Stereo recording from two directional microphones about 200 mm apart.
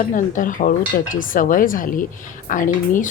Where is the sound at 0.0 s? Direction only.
40° left (ahead or behind).